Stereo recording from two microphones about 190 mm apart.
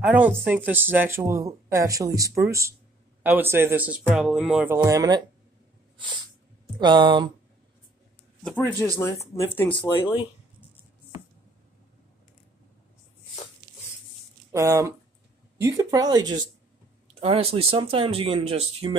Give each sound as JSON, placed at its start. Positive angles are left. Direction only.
{"t": 0.0, "sound": "speech", "side_deg": -10}
{"t": 4.6, "sound": "speech", "side_deg": -15}
{"t": 6.8, "sound": "speech", "side_deg": -25}
{"t": 8.5, "sound": "speech", "side_deg": 10}
{"t": 14.5, "sound": "speech", "side_deg": -15}
{"t": 17.1, "sound": "speech", "side_deg": -30}